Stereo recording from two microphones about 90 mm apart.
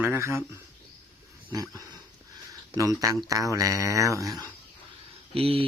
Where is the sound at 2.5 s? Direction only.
40° right (ahead or behind).